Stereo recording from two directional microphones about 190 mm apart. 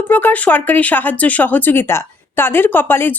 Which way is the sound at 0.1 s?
10° left (ahead or behind).